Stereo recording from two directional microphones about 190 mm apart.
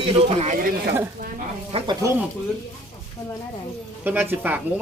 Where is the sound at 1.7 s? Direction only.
25° right (ahead or behind).